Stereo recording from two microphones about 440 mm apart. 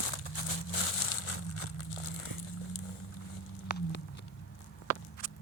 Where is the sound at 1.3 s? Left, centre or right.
Left.